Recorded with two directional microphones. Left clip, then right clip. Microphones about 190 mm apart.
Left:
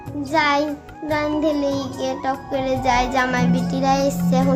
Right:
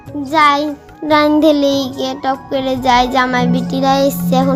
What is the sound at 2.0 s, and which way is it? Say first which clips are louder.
Music: right 5 dB; 30° right (ahead or behind).